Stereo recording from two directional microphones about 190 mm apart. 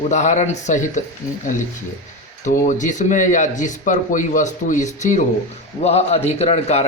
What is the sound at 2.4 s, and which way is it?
Speech, 40° left (ahead or behind).